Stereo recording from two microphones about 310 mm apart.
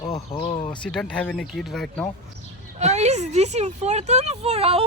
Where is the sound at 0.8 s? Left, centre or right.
Centre.